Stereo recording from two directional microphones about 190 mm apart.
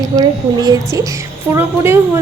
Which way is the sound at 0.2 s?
20° right (ahead or behind).